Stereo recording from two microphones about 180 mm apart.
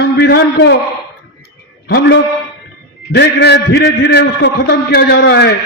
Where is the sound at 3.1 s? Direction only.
70° left (ahead or behind).